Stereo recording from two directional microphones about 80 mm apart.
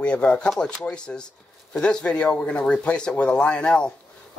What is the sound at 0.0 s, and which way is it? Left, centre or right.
Speech, centre.